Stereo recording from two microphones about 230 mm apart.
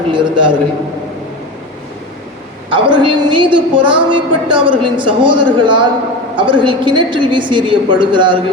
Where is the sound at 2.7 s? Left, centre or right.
Right.